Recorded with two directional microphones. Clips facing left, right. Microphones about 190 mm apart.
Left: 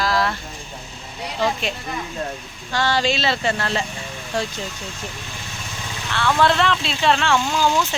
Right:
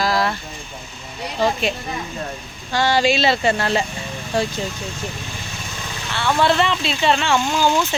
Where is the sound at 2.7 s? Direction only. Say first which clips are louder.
Right 3 dB; 15° right (ahead or behind).